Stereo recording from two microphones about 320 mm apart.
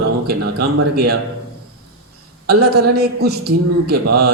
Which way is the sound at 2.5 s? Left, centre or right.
Right.